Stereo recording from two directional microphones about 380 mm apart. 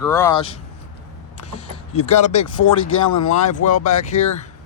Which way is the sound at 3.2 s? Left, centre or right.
Left.